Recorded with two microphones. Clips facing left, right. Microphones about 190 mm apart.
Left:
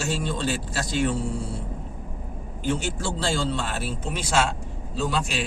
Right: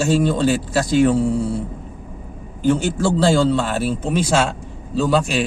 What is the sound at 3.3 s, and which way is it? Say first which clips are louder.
A man's voice: right 8 dB; 45° right (ahead or behind).